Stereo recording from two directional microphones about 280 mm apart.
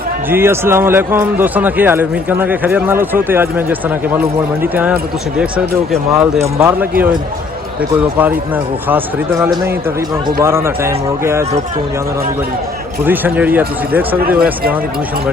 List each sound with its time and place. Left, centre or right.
0.3 s a man's voice: centre
13.1 s a man's voice: centre
14.2 s speech: right